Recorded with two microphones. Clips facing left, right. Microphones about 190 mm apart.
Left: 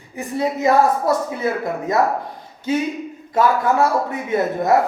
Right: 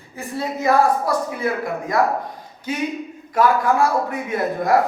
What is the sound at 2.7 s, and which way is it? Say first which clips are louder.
A man's voice: left 4 dB; 25° left (ahead or behind).